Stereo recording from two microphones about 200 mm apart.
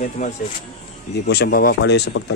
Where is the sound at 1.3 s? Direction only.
55° left (ahead or behind).